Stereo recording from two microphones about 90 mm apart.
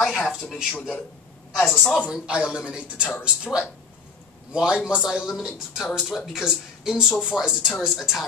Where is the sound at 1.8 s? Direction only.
10° left (ahead or behind).